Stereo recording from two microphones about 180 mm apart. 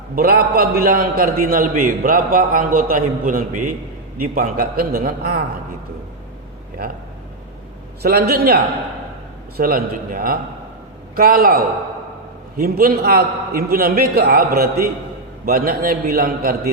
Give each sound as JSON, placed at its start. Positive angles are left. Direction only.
{"t": 0.2, "sound": "a man's voice", "side_deg": -55}
{"t": 8.0, "sound": "a man's voice", "side_deg": -60}